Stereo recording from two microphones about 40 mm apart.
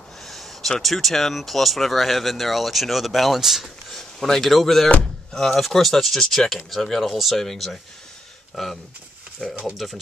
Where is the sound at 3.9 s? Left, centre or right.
Centre.